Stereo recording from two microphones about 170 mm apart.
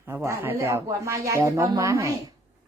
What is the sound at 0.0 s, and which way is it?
A woman's voice, 15° right (ahead or behind).